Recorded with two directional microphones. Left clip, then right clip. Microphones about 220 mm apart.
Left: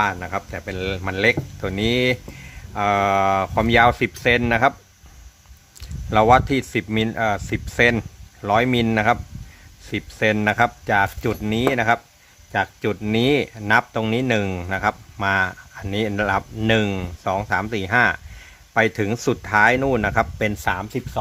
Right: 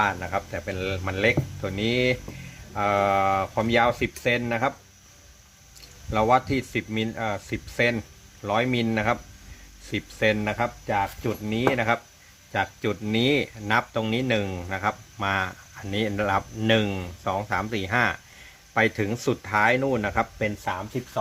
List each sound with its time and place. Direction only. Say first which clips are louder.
0.0 s speech: left 2 dB; 25° left (ahead or behind)
6.1 s speech: left 6 dB; 30° left (ahead or behind)
20.7 s speech: left 6 dB; 50° left (ahead or behind)